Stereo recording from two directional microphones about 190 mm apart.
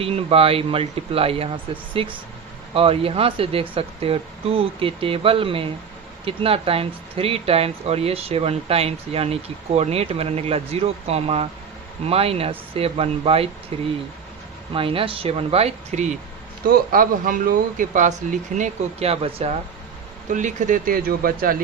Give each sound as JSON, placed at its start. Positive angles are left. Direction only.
{"t": 0.0, "sound": "speech", "side_deg": -30}
{"t": 16.6, "sound": "speech", "side_deg": -50}
{"t": 20.3, "sound": "speech", "side_deg": -40}